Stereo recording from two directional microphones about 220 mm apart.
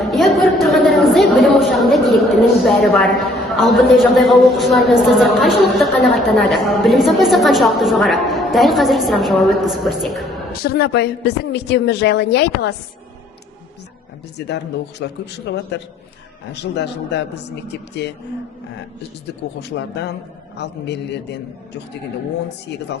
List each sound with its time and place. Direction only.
0.0 s a woman's voice: centre (ahead or behind)
10.5 s speech: 45° left (ahead or behind)
14.3 s speech: 50° left (ahead or behind)
19.6 s speech: 50° left (ahead or behind)